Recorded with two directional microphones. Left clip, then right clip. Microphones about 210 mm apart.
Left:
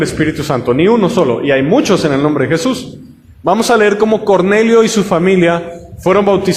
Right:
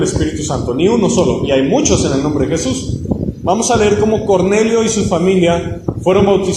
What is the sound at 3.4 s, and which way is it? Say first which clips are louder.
A man's voice: left 3 dB; 45° left (ahead or behind).